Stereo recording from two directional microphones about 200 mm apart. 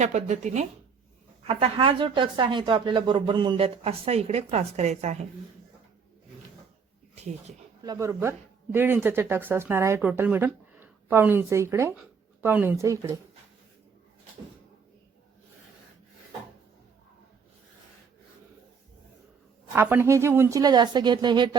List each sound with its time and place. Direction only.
0.0 s speech: 35° right (ahead or behind)
7.9 s speech: 15° right (ahead or behind)
19.7 s speech: 10° right (ahead or behind)